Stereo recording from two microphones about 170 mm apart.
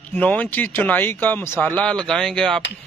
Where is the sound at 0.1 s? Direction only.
10° left (ahead or behind).